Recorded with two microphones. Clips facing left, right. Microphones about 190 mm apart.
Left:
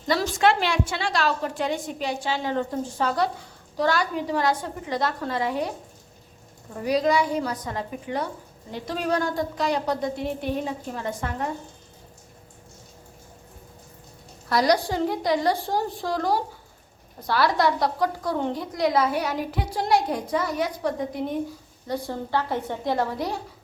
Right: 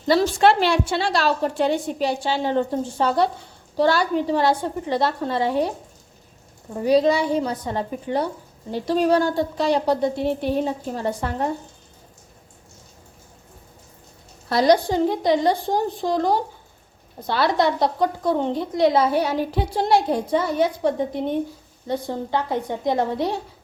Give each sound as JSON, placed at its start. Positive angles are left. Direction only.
{"t": 0.1, "sound": "a woman's voice", "side_deg": -30}
{"t": 6.7, "sound": "a woman's voice", "side_deg": -30}
{"t": 14.5, "sound": "a woman's voice", "side_deg": -25}